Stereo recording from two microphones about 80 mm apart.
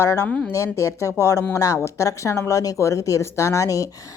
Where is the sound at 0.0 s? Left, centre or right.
Left.